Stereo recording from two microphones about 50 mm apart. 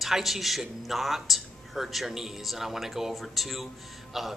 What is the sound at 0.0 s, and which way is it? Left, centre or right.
Speech, centre.